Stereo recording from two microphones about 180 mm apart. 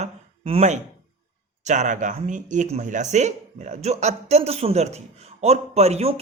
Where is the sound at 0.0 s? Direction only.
35° right (ahead or behind).